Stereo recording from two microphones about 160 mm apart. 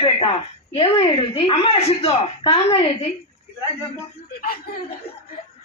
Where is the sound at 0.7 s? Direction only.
40° left (ahead or behind).